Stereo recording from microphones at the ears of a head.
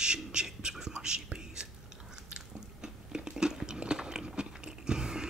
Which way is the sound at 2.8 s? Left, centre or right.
Centre.